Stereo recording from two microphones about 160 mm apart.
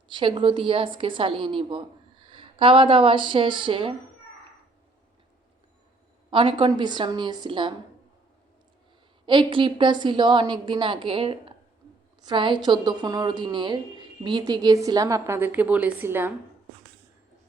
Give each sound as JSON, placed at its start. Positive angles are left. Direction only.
{"t": 0.1, "sound": "a woman's voice", "side_deg": -30}
{"t": 6.3, "sound": "speech", "side_deg": -30}
{"t": 9.2, "sound": "a woman's voice", "side_deg": -30}